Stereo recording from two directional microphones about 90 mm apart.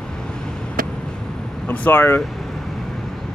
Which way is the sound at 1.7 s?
20° left (ahead or behind).